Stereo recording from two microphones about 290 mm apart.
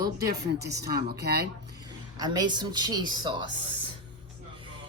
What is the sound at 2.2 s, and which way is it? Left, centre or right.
Speech, centre.